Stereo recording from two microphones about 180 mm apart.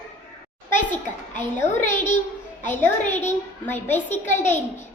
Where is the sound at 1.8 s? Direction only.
45° left (ahead or behind).